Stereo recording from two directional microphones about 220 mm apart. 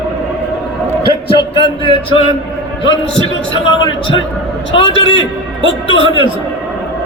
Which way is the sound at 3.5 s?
25° left (ahead or behind).